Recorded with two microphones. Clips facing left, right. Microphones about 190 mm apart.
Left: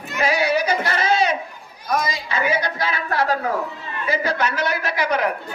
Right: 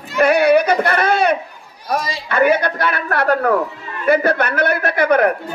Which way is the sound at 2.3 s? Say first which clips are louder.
Right 9 dB; 60° right (ahead or behind).